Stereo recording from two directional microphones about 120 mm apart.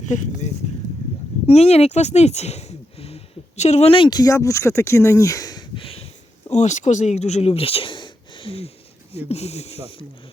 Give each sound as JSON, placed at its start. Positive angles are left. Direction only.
{"t": 0.1, "sound": "speech", "side_deg": 80}
{"t": 1.5, "sound": "speech", "side_deg": 60}
{"t": 4.2, "sound": "speech", "side_deg": 25}
{"t": 6.5, "sound": "speech", "side_deg": 75}